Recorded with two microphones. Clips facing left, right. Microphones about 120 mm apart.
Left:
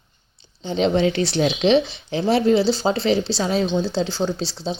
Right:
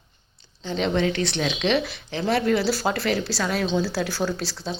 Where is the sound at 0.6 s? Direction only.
30° left (ahead or behind).